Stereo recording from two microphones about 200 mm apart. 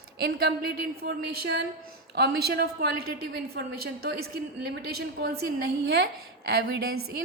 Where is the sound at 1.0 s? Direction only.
55° right (ahead or behind).